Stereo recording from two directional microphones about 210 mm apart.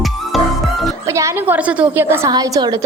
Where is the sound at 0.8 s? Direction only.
15° right (ahead or behind).